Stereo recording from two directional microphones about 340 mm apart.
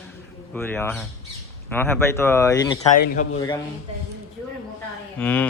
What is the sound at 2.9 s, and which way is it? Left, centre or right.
Speech, left.